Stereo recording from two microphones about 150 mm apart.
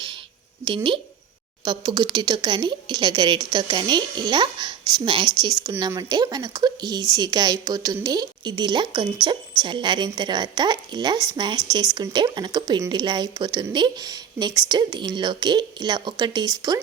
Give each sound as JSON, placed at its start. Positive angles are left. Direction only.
{"t": 0.6, "sound": "speech", "side_deg": -30}